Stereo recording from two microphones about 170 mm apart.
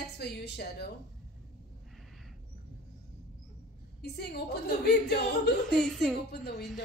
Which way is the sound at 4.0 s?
75° left (ahead or behind).